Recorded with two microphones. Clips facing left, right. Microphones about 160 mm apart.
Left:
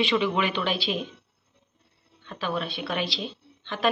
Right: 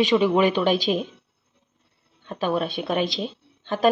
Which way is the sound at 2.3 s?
45° right (ahead or behind).